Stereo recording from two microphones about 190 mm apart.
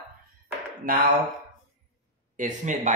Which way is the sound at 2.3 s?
40° right (ahead or behind).